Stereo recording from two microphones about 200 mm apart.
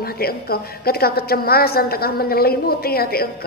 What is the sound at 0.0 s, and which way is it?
A woman's voice, 50° left (ahead or behind).